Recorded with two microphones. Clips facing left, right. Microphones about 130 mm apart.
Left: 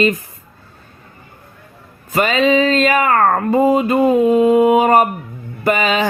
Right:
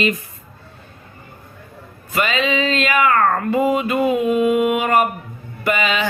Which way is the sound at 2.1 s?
40° left (ahead or behind).